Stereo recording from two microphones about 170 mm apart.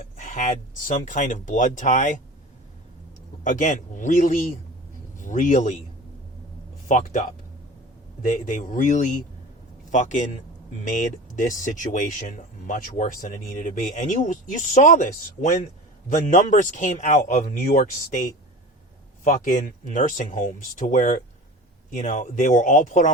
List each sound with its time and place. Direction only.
0.0 s a sound: 50° left (ahead or behind)
1.0 s speech: 50° left (ahead or behind)
3.4 s a man's voice: 50° left (ahead or behind)
6.8 s speech: 45° left (ahead or behind)
8.4 s speech: 50° left (ahead or behind)
19.2 s speech: 50° left (ahead or behind)